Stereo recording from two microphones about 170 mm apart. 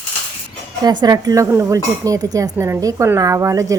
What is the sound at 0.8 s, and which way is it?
Speech, 25° right (ahead or behind).